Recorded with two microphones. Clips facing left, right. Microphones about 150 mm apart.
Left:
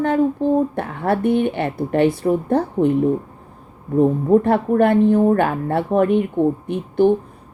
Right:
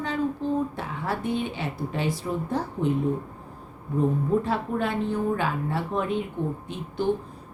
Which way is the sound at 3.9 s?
60° left (ahead or behind).